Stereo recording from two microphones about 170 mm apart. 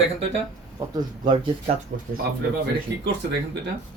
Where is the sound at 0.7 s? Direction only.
25° right (ahead or behind).